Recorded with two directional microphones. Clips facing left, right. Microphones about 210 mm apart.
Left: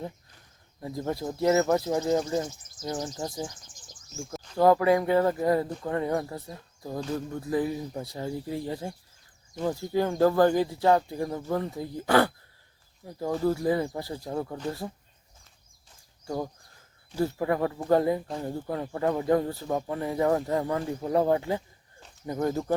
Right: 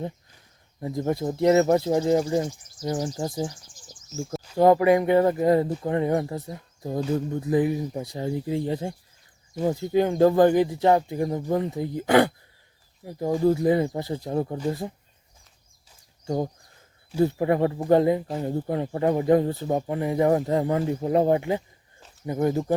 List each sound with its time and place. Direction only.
0.8 s speech: 20° right (ahead or behind)
2.3 s speech: 15° right (ahead or behind)
3.2 s speech: 25° right (ahead or behind)
4.5 s speech: 20° right (ahead or behind)
16.2 s speech: 25° right (ahead or behind)